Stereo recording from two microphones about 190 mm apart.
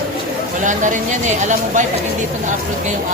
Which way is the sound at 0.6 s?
40° right (ahead or behind).